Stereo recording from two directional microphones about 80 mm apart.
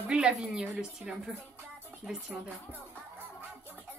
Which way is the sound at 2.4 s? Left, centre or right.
Right.